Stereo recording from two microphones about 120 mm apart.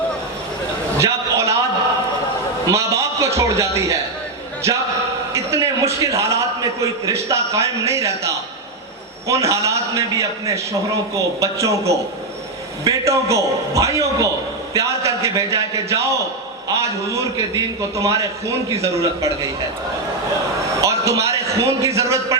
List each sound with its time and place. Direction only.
0.9 s a sound: 25° right (ahead or behind)
2.6 s a man's voice: 25° right (ahead or behind)
5.3 s a man's voice: 25° right (ahead or behind)
20.8 s a man's voice: 25° right (ahead or behind)